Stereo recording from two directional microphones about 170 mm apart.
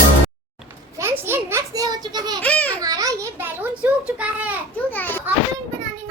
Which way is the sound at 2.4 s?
10° left (ahead or behind).